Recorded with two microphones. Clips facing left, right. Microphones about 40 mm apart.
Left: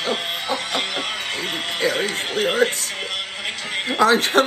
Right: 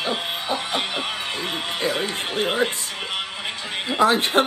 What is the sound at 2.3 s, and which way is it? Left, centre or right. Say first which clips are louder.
Speech: left 3 dB; right.